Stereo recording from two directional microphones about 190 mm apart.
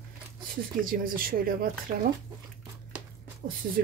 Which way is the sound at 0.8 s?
50° right (ahead or behind).